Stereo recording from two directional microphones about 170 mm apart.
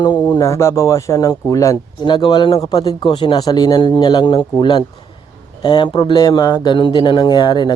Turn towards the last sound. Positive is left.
turn(degrees=25)  # may be behind; listen again after turning